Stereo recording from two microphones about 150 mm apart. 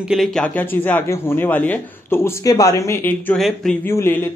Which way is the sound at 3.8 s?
15° left (ahead or behind).